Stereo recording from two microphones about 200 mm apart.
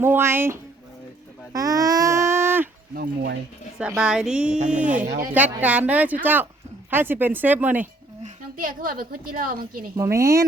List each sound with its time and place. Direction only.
0.0 s speech: 10° right (ahead or behind)
1.5 s a sound: 20° right (ahead or behind)
2.9 s speech: 50° right (ahead or behind)
3.8 s speech: 5° right (ahead or behind)
4.9 s speech: 40° right (ahead or behind)
5.3 s speech: 10° right (ahead or behind)
8.2 s a woman's voice: 45° right (ahead or behind)
9.9 s speech: 15° right (ahead or behind)